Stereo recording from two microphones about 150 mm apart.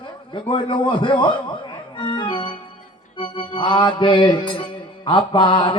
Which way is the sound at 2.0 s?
30° left (ahead or behind).